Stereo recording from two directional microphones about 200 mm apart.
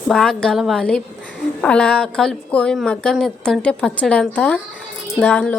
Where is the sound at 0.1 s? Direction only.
Centre (ahead or behind).